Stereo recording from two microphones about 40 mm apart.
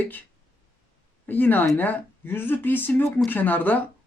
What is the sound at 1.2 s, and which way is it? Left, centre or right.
Speech, left.